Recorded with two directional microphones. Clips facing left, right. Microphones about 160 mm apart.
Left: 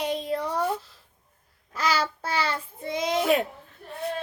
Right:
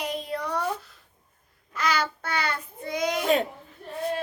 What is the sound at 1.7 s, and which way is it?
Child singing, 30° left (ahead or behind).